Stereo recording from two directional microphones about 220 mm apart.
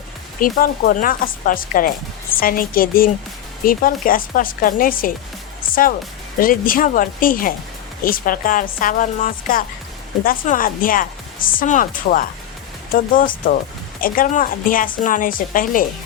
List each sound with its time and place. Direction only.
0.3 s speech: 40° left (ahead or behind)